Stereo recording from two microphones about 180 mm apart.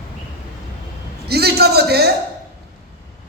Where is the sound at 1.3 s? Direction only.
60° right (ahead or behind).